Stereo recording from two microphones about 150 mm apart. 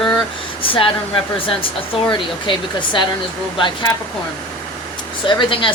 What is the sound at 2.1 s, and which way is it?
Speech, 30° left (ahead or behind).